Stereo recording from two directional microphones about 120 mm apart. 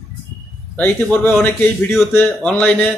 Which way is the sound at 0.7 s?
10° left (ahead or behind).